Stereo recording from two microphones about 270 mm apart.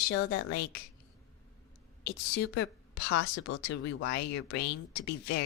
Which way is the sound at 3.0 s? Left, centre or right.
Left.